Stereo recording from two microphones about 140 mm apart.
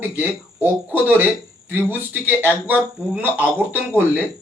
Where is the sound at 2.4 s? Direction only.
10° right (ahead or behind).